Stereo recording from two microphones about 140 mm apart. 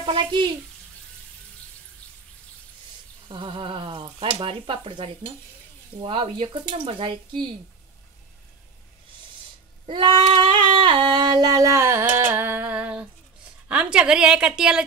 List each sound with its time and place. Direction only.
0.0 s speech: 35° right (ahead or behind)
3.3 s speech: 35° right (ahead or behind)
9.8 s singing: 35° right (ahead or behind); by 13.0 s 10° right (ahead or behind)
13.7 s a woman's voice: 10° right (ahead or behind)